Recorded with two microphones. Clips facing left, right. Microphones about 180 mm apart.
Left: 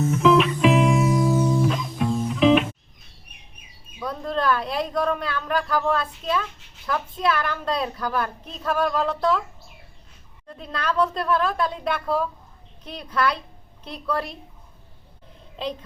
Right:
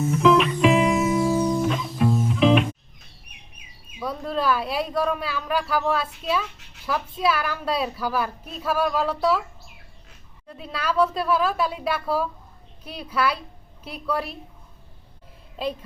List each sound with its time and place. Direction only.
0.1 s music: centre (ahead or behind)
4.0 s a woman's voice: 5° right (ahead or behind)
10.5 s a woman's voice: 5° right (ahead or behind)